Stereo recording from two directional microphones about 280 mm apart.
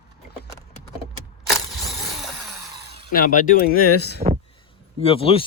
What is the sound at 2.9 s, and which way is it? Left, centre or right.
Speech, left.